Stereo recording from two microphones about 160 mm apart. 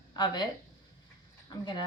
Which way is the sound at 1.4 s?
25° left (ahead or behind).